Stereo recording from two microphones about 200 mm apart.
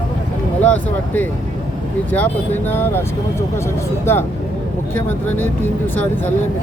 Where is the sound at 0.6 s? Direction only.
5° left (ahead or behind).